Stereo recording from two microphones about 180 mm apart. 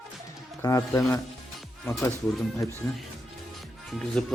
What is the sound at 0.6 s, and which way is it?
Speech, 20° left (ahead or behind).